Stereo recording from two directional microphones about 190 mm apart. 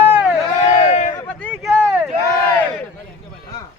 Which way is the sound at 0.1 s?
5° right (ahead or behind).